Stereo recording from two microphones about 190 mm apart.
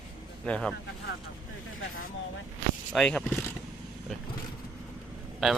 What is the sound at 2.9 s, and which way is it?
Speech, 5° left (ahead or behind).